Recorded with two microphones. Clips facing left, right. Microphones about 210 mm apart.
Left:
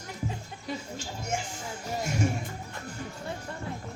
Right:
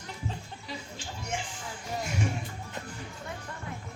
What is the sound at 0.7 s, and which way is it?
Speech, 45° left (ahead or behind).